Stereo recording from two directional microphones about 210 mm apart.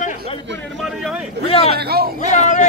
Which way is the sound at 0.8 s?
Centre (ahead or behind).